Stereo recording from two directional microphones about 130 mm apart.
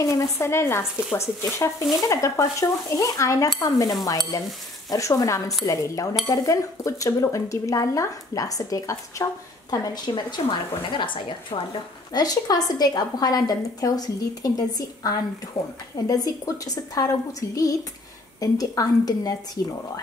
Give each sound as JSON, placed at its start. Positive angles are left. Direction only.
{"t": 0.0, "sound": "a woman's voice", "side_deg": 20}